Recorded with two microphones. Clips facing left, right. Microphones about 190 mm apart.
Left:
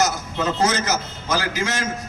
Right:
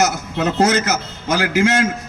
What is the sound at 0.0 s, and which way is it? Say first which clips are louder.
A man's voice: right 3 dB; 65° right (ahead or behind).